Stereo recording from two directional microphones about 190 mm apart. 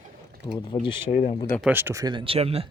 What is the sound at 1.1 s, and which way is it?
Speech, 40° left (ahead or behind).